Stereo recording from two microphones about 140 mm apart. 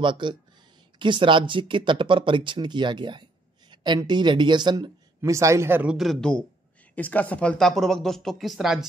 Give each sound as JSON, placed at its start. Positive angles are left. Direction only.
{"t": 0.0, "sound": "speech", "side_deg": -35}
{"t": 5.9, "sound": "speech", "side_deg": 5}